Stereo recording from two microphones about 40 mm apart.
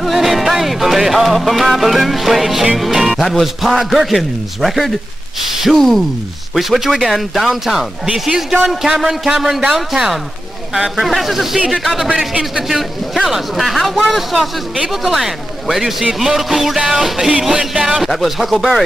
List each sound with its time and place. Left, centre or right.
0.0 s music: centre
5.4 s a man's voice: centre
5.8 s music: centre
8.8 s a man's voice: centre
10.7 s music: centre
14.9 s a man's voice: centre
18.1 s music: centre